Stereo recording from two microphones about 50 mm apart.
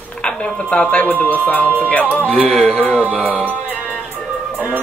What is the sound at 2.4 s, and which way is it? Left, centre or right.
Speech, centre.